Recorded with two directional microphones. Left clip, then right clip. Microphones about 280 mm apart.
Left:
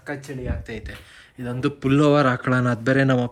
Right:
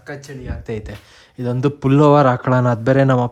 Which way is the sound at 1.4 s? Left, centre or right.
Right.